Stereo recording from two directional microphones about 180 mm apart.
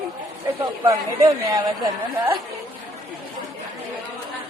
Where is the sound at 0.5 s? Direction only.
15° right (ahead or behind).